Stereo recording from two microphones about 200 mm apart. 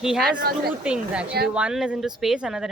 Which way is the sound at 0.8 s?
5° right (ahead or behind).